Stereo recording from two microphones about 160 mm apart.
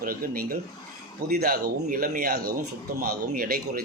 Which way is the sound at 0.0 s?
65° right (ahead or behind).